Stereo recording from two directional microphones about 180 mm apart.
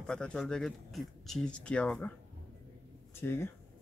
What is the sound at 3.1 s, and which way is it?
Speech, 15° left (ahead or behind).